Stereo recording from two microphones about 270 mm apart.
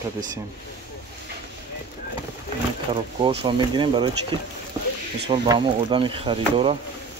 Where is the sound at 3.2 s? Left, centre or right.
Centre.